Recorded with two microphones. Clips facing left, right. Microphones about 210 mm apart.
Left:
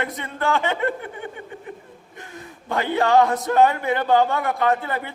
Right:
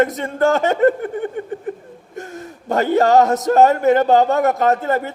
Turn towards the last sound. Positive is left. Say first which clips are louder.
# right 5 dB
turn(degrees=-45)  # may be behind; listen again after turning